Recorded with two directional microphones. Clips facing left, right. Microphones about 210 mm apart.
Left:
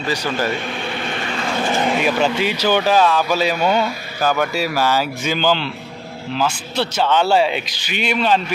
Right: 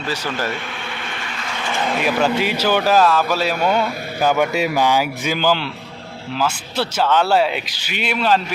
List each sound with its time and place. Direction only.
0.3 s speech: 10° left (ahead or behind)
1.0 s vehicle: 35° left (ahead or behind)
2.1 s speech: 5° right (ahead or behind)
4.2 s speech: 20° right (ahead or behind)